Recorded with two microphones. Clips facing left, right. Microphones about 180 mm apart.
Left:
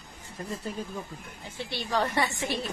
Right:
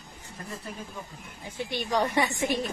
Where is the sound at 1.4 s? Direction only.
15° right (ahead or behind).